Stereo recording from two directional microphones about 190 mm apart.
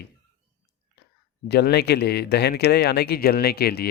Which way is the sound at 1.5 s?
60° left (ahead or behind).